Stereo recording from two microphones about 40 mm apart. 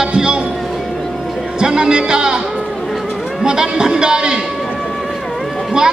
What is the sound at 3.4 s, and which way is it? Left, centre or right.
Speech, centre.